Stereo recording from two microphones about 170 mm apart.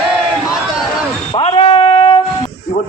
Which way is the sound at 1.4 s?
30° left (ahead or behind).